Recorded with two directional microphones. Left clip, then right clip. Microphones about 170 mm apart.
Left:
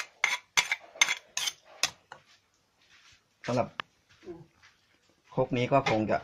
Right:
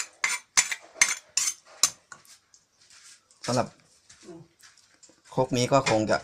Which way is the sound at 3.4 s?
30° right (ahead or behind).